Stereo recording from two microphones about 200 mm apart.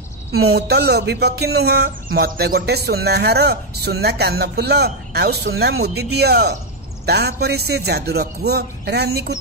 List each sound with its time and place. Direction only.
0.3 s speech: 90° right
0.6 s music: 55° right (ahead or behind)
2.1 s speech: 50° right (ahead or behind)